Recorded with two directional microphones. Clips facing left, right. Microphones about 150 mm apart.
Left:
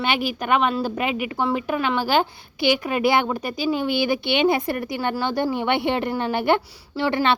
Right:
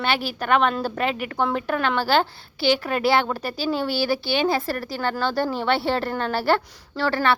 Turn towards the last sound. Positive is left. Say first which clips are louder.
# left 1 dB
turn(degrees=15)  # may be behind; listen again after turning